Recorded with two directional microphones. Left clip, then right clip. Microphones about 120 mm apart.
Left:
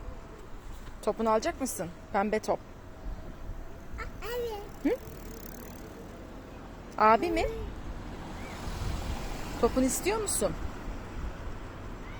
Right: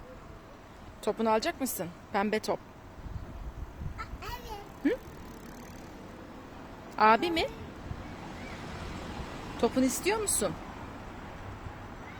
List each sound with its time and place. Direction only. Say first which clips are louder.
1.0 s speech: left 1 dB; 10° right (ahead or behind)
3.9 s bow-wow: left 5 dB; 20° right (ahead or behind)
6.9 s speech: even; 10° right (ahead or behind)
9.6 s speech: left 1 dB; 10° right (ahead or behind)